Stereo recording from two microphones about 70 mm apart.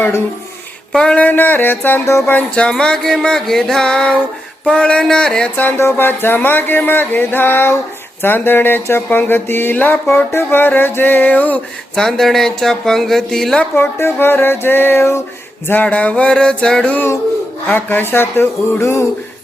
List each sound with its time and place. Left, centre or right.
0.9 s speech: centre
1.2 s a sound: left
2.6 s speech: centre
5.5 s a sound: left
11.9 s speech: centre
13.7 s music: left
15.6 s speech: left
17.7 s music: left